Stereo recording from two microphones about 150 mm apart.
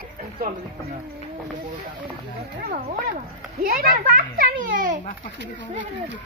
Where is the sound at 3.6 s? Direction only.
75° right (ahead or behind).